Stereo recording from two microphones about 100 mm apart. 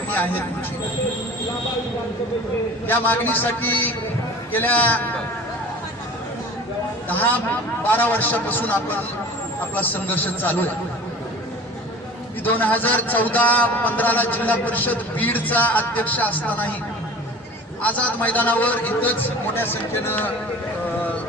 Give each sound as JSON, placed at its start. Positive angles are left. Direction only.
{"t": 0.1, "sound": "speech", "side_deg": 15}
{"t": 2.8, "sound": "a man's voice", "side_deg": 20}
{"t": 7.1, "sound": "a man's voice", "side_deg": 20}
{"t": 12.5, "sound": "a man's voice", "side_deg": 15}
{"t": 17.8, "sound": "a man's voice", "side_deg": 15}